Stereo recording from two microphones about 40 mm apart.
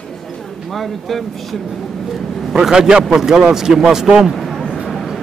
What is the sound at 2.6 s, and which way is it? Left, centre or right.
Speech, centre.